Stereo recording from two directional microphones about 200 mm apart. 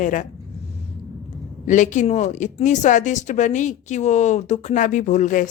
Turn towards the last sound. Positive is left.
turn(degrees=40)  # may be behind; listen again after turning